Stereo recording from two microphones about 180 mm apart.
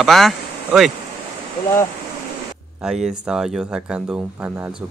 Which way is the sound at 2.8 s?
5° right (ahead or behind).